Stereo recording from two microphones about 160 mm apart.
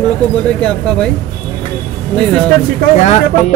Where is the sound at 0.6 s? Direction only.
5° left (ahead or behind).